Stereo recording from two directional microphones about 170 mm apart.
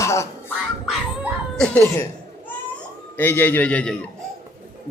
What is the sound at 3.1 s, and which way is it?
Speech, 10° left (ahead or behind).